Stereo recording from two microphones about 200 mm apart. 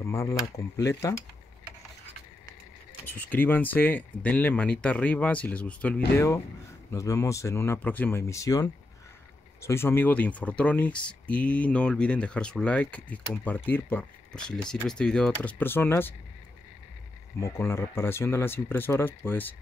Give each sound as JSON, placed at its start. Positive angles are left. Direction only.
{"t": 0.0, "sound": "speech", "side_deg": 15}
{"t": 3.1, "sound": "speech", "side_deg": 10}
{"t": 17.4, "sound": "speech", "side_deg": 15}